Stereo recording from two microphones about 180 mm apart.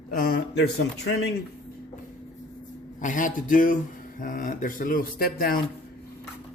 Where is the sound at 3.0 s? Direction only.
45° left (ahead or behind).